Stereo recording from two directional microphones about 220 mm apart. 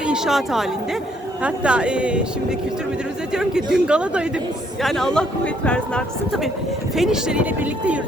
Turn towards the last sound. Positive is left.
turn(degrees=-5)  # may be behind; listen again after turning